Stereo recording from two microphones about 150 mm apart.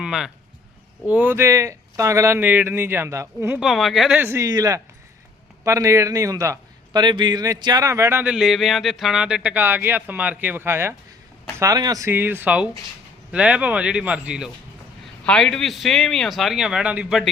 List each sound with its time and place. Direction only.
0.0 s a man's voice: 5° right (ahead or behind)
3.6 s speech: centre (ahead or behind)
4.2 s a man's voice: 20° right (ahead or behind)
15.2 s speech: 5° left (ahead or behind)